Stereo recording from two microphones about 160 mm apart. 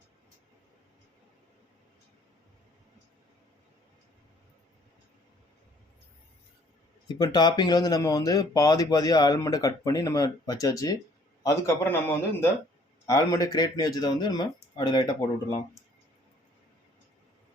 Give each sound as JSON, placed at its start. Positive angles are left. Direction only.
{"t": 7.1, "sound": "speech", "side_deg": 25}